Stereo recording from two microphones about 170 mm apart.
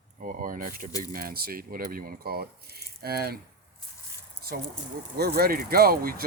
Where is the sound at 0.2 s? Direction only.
50° right (ahead or behind).